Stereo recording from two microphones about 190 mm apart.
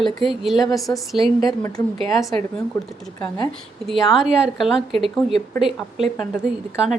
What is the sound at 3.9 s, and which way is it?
A woman's voice, centre (ahead or behind).